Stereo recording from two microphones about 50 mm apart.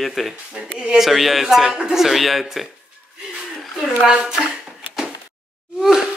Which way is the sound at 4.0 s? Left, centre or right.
Centre.